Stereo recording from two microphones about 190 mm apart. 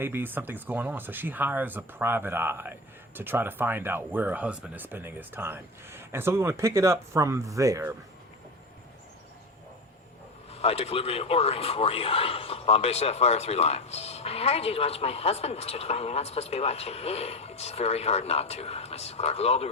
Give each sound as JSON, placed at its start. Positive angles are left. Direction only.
{"t": 0.0, "sound": "speech", "side_deg": -10}
{"t": 10.5, "sound": "a man's voice", "side_deg": 30}